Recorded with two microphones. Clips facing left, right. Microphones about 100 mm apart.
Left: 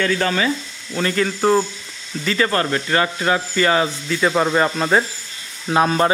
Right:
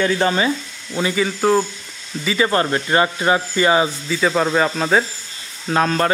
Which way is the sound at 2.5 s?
20° right (ahead or behind).